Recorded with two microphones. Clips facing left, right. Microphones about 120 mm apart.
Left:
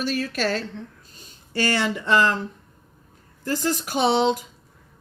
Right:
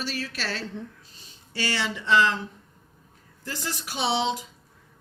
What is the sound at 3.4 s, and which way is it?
Speech, 45° left (ahead or behind).